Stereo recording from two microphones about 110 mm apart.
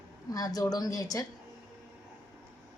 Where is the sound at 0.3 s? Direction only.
35° left (ahead or behind).